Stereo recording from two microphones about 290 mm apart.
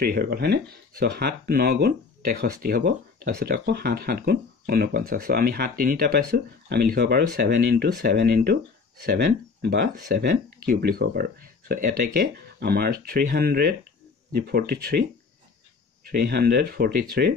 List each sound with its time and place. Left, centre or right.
0.0 s speech: right